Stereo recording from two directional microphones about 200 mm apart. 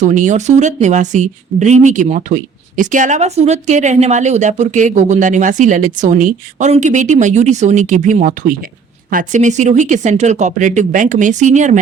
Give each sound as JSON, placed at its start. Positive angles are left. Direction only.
{"t": 0.0, "sound": "speech", "side_deg": -40}